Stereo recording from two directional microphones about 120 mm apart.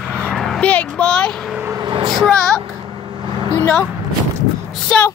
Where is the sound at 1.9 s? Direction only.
35° right (ahead or behind).